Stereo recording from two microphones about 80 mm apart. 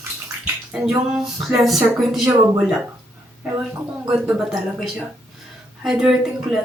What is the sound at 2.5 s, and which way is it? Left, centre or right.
Speech, centre.